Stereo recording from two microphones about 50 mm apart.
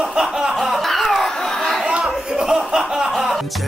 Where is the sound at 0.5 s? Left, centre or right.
Centre.